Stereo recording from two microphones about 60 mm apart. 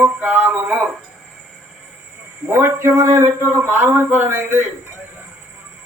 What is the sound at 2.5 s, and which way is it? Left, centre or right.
Speech, right.